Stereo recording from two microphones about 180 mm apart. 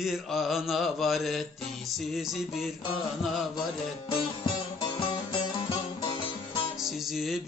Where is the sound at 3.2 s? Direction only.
Centre (ahead or behind).